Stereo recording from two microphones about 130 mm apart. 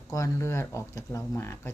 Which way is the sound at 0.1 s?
25° left (ahead or behind).